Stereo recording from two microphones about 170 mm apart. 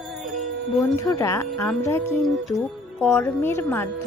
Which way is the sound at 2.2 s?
5° left (ahead or behind).